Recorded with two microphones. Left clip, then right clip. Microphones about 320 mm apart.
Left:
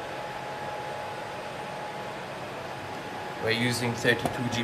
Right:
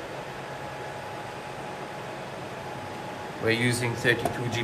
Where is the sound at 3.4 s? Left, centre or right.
Centre.